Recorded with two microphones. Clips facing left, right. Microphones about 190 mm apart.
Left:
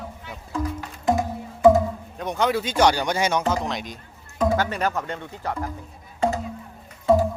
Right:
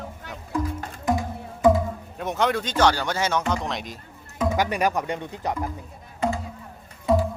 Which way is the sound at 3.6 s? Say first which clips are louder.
Left 1 dB; centre (ahead or behind).